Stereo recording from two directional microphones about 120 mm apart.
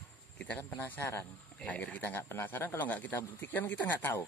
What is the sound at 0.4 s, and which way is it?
Speech, 15° left (ahead or behind).